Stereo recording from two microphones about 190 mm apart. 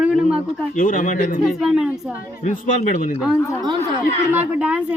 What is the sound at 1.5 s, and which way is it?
Speech, centre (ahead or behind).